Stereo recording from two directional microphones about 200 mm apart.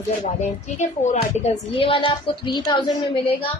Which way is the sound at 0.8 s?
35° left (ahead or behind).